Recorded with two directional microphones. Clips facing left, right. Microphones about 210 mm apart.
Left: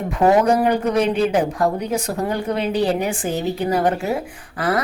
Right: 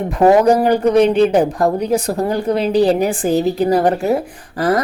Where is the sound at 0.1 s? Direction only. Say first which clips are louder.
Right 4 dB; 35° right (ahead or behind).